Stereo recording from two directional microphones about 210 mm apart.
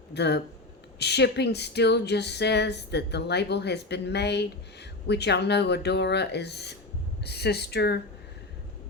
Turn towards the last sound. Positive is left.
turn(degrees=50)  # may be behind; listen again after turning